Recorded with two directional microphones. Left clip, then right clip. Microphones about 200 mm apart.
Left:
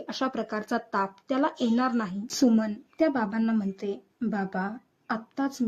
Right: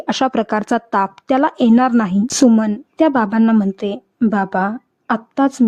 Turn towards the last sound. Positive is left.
turn(degrees=-45)  # may be behind; listen again after turning